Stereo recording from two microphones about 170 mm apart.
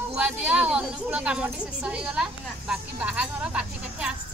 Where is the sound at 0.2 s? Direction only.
5° right (ahead or behind).